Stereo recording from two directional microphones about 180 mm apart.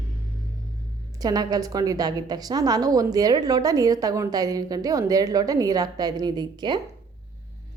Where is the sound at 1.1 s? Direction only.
20° right (ahead or behind).